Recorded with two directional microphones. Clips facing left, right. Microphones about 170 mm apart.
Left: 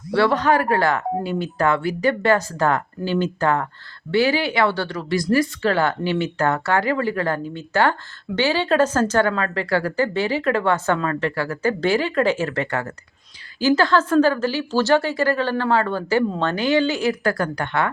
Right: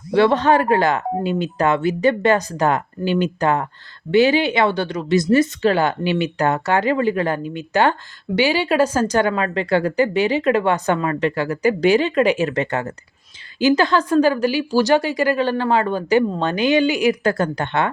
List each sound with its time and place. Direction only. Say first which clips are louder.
0.1 s a woman's voice: right 3 dB; 20° right (ahead or behind)